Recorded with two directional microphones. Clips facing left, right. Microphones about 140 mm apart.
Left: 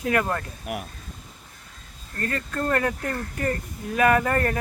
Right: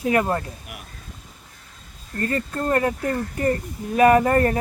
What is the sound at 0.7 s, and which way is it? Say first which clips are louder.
Speech: left 10 dB; 55° left (ahead or behind).